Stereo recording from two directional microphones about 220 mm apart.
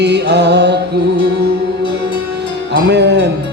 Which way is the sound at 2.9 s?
50° right (ahead or behind).